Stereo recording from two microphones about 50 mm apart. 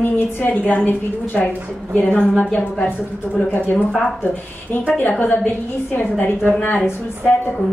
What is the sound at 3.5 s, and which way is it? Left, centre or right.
A woman's voice, left.